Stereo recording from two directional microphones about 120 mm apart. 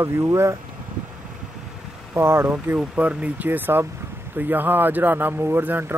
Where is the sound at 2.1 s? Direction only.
20° right (ahead or behind).